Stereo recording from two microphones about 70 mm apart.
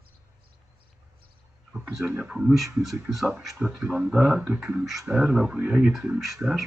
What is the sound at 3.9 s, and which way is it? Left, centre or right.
Speech, centre.